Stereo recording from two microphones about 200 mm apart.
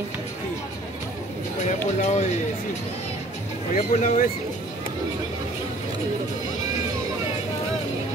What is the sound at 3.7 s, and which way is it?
Speech, 40° left (ahead or behind).